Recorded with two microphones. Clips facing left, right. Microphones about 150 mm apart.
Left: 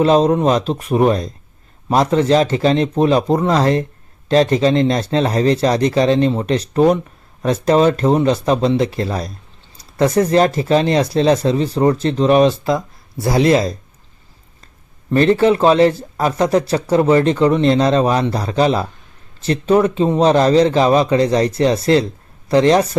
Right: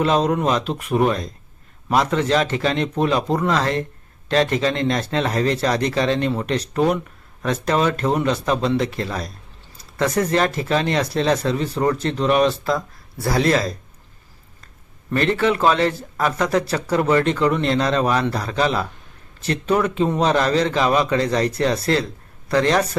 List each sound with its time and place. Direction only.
0.0 s speech: 30° left (ahead or behind)
15.1 s speech: 30° left (ahead or behind)